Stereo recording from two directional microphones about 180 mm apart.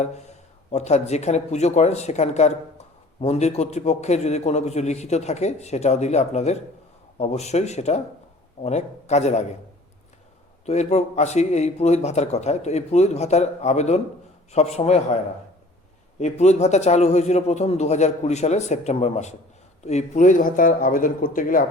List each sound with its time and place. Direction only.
0.0 s speech: 40° left (ahead or behind)
10.7 s speech: 40° left (ahead or behind)
16.2 s speech: 40° left (ahead or behind)